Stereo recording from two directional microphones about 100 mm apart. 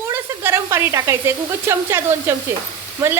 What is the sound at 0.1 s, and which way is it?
Speech, 25° right (ahead or behind).